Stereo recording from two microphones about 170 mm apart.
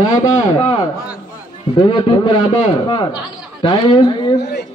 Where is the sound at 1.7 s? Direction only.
25° left (ahead or behind).